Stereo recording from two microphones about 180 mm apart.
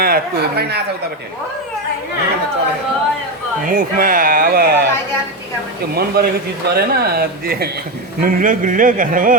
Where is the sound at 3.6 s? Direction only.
50° right (ahead or behind).